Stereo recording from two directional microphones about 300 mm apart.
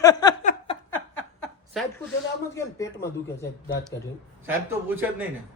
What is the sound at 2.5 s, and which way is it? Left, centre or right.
Speech, centre.